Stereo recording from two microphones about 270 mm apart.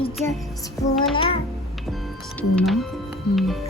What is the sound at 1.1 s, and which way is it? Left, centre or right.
Speech, centre.